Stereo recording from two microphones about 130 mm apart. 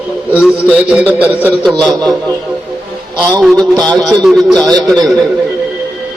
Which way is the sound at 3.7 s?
30° right (ahead or behind).